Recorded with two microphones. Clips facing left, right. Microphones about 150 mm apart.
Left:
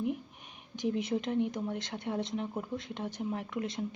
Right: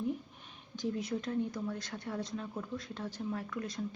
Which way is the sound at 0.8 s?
20° left (ahead or behind).